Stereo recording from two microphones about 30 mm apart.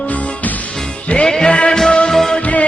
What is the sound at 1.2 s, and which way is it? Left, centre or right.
Music, left.